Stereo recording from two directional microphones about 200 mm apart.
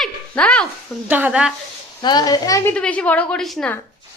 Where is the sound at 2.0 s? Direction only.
20° left (ahead or behind).